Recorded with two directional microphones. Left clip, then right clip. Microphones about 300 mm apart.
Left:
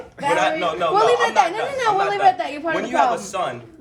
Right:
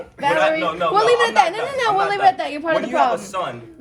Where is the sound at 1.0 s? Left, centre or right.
Right.